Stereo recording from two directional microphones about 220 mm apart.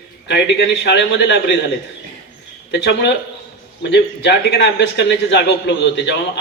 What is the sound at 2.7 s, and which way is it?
A man's voice, 50° left (ahead or behind).